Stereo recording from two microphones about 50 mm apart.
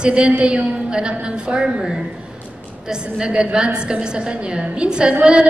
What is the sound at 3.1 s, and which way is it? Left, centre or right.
A woman's voice, centre.